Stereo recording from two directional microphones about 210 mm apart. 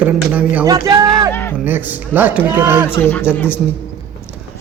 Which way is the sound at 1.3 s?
10° left (ahead or behind).